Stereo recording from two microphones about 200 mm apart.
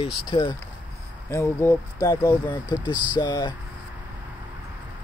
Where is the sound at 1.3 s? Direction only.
10° left (ahead or behind).